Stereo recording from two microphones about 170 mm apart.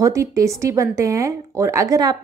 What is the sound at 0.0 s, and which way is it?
Speech, 20° right (ahead or behind).